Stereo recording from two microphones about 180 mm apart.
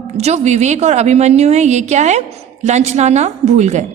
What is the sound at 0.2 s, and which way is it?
A woman's voice, 40° right (ahead or behind).